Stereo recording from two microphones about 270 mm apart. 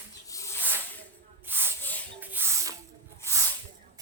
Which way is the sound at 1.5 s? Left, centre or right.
Centre.